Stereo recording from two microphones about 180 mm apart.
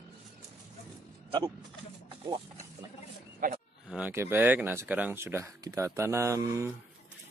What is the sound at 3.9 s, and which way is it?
Speech, 10° right (ahead or behind).